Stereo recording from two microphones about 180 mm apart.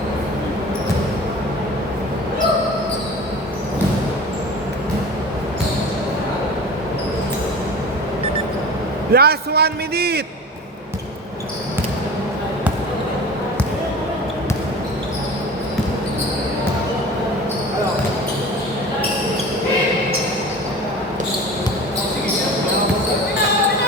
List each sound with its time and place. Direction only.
9.1 s a man's voice: 60° right (ahead or behind)